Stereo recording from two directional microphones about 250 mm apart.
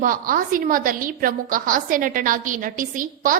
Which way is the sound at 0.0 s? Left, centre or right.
Right.